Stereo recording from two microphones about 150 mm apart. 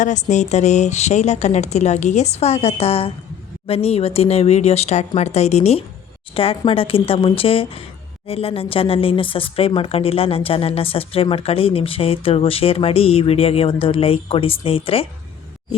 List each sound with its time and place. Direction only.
0.0 s a woman's voice: 55° left (ahead or behind)